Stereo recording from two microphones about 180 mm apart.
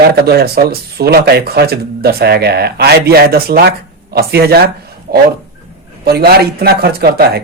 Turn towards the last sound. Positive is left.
turn(degrees=-60)  # may be behind; listen again after turning